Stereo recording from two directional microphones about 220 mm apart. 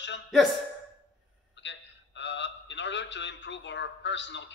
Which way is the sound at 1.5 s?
55° left (ahead or behind).